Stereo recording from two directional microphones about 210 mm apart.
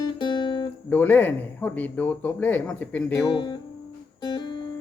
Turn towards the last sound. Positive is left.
turn(degrees=20)  # may be behind; listen again after turning